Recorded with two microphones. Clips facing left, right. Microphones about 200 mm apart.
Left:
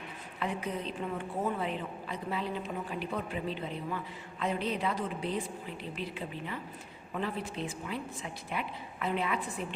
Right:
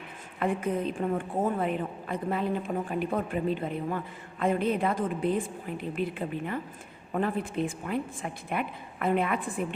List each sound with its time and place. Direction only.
0.3 s a woman's voice: 50° right (ahead or behind)